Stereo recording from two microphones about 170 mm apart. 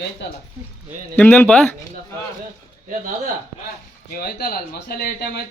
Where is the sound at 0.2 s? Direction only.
90° left.